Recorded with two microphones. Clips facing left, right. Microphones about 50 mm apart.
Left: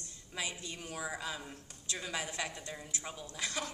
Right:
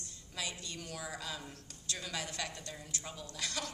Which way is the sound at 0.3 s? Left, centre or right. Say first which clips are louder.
Left 2 dB; centre.